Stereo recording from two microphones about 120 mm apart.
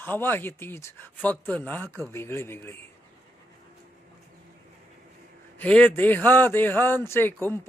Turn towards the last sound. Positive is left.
turn(degrees=15)  # may be behind; listen again after turning